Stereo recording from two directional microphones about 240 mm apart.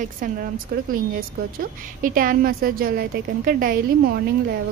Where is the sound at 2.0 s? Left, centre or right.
Right.